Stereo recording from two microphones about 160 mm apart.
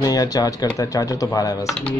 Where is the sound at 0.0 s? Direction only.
25° left (ahead or behind).